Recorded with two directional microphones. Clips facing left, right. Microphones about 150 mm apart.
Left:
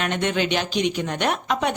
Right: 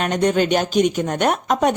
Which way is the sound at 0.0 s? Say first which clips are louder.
Right 5 dB; 40° right (ahead or behind).